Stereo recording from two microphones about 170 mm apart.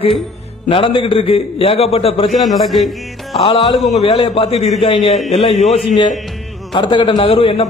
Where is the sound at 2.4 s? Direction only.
Centre (ahead or behind).